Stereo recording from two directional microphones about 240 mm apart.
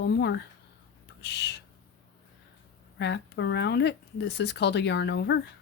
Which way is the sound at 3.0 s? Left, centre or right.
Left.